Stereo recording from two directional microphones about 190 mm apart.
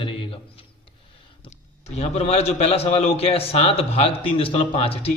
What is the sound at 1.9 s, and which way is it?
A man's voice, 35° left (ahead or behind).